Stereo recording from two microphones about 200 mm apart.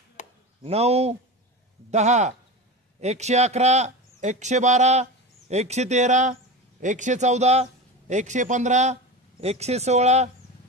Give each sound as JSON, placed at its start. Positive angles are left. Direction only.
{"t": 0.2, "sound": "chop", "side_deg": 35}
{"t": 0.6, "sound": "a man's voice", "side_deg": -30}